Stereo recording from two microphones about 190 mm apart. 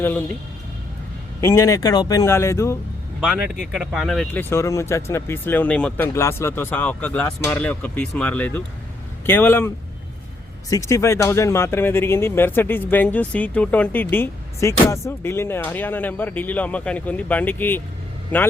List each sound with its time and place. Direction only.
1.4 s speech: 15° left (ahead or behind)
3.2 s speech: 5° right (ahead or behind)